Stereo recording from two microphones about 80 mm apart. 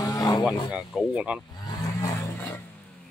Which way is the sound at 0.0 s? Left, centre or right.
Left.